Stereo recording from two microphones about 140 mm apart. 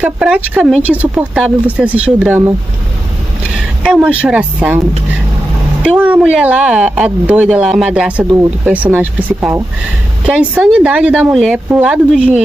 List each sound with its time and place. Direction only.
0.0 s speech: 5° right (ahead or behind)
3.5 s speech: 5° right (ahead or behind)